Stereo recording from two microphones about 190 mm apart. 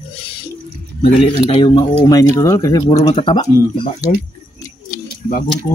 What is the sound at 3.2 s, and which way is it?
Speech, 30° left (ahead or behind).